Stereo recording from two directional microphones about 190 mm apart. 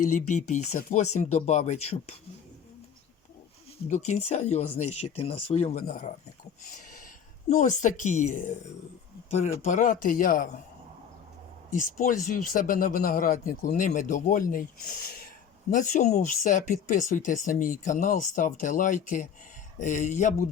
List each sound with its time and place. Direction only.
0.0 s speech: 40° left (ahead or behind)
3.8 s speech: 35° left (ahead or behind)
7.5 s speech: 40° left (ahead or behind)
9.6 s speech: 40° left (ahead or behind)
11.7 s speech: 40° left (ahead or behind)